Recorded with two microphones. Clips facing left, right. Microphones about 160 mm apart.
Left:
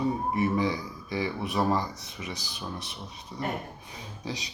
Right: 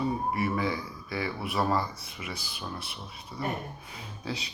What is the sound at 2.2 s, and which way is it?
Speech, 40° left (ahead or behind).